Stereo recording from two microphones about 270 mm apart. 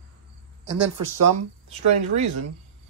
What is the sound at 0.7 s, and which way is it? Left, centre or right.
Speech, right.